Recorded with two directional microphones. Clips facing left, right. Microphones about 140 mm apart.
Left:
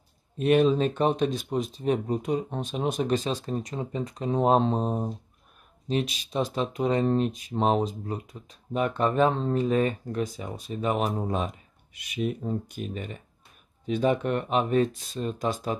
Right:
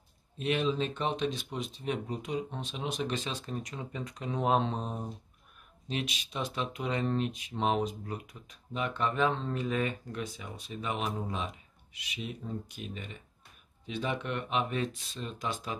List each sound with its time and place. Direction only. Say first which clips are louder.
0.4 s speech: left 9 dB; 50° left (ahead or behind); by 8.5 s 30° left (ahead or behind)
8.7 s speech: left 7 dB; 45° left (ahead or behind)